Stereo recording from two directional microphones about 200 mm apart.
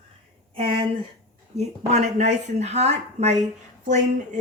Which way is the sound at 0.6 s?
25° right (ahead or behind).